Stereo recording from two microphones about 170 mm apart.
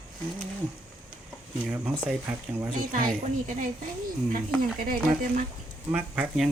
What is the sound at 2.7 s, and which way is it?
Speech, 50° right (ahead or behind).